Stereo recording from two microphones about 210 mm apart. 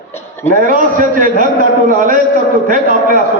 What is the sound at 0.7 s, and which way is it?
A man's voice, 40° right (ahead or behind).